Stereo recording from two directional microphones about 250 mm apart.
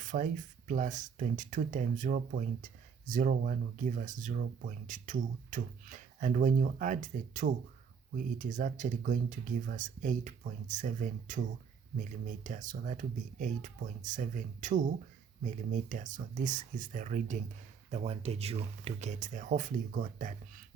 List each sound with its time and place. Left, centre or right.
0.0 s speech: right